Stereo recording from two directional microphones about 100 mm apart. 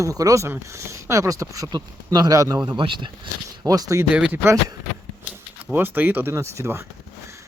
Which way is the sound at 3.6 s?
35° right (ahead or behind).